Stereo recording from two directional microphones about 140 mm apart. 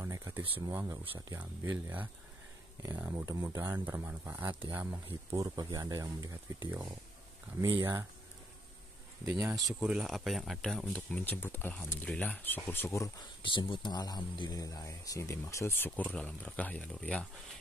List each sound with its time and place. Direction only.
0.0 s speech: 20° right (ahead or behind)
9.2 s speech: 20° right (ahead or behind)
9.8 s speech: 5° right (ahead or behind); by 13.1 s 20° left (ahead or behind)
13.4 s speech: 35° left (ahead or behind); by 17.3 s 10° left (ahead or behind)